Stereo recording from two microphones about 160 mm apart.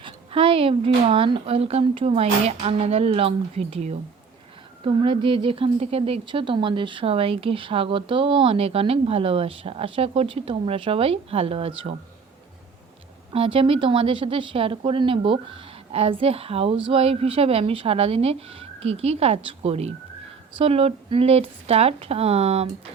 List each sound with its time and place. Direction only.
0.0 s speech: 35° right (ahead or behind)
13.3 s speech: 35° right (ahead or behind)